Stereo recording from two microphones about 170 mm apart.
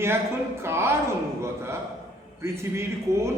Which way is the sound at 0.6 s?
15° right (ahead or behind).